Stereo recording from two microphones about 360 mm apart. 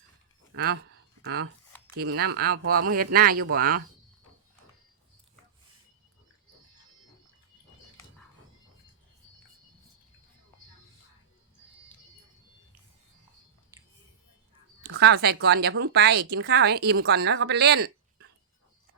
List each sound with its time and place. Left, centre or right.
0.5 s speech: right
14.8 s speech: right